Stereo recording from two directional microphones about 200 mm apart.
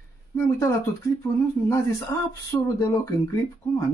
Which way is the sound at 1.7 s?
15° left (ahead or behind).